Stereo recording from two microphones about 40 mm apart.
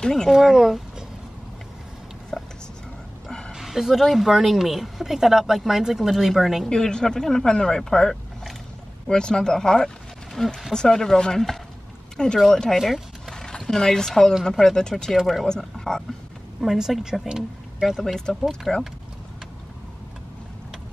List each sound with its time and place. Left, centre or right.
0.0 s speech: centre
0.3 s speech: centre
2.3 s a sound: centre
3.3 s bow-wow: centre
3.5 s speech: centre
6.7 s speech: centre
12.4 s speech: centre
12.7 s speech: centre
13.3 s a sound: centre
13.7 s speech: centre
15.1 s speech: centre
15.4 s speech: centre
16.6 s speech: centre
18.0 s speech: centre